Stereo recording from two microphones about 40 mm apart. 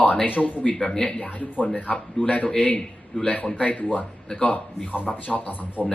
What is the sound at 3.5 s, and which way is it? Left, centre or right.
Speech, left.